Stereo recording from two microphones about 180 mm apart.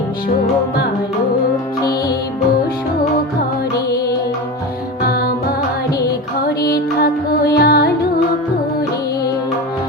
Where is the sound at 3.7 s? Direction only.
20° left (ahead or behind).